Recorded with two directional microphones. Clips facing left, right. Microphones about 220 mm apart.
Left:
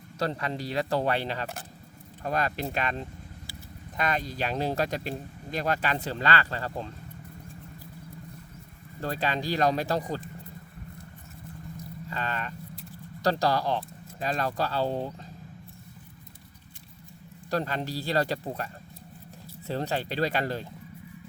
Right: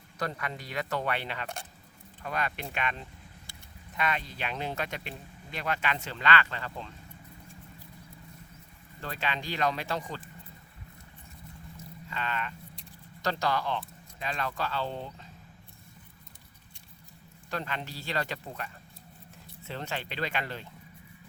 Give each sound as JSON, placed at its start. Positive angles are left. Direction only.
{"t": 0.2, "sound": "speech", "side_deg": 30}
{"t": 3.5, "sound": "vehicle", "side_deg": 5}
{"t": 3.9, "sound": "speech", "side_deg": 40}
{"t": 9.0, "sound": "speech", "side_deg": 40}
{"t": 12.1, "sound": "vehicle", "side_deg": 40}
{"t": 13.2, "sound": "speech", "side_deg": 35}
{"t": 17.5, "sound": "speech", "side_deg": 40}